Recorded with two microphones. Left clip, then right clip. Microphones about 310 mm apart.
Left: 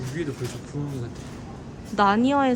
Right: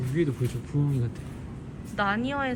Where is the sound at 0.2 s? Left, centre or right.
Centre.